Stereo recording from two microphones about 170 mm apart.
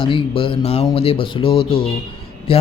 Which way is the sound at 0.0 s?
30° left (ahead or behind).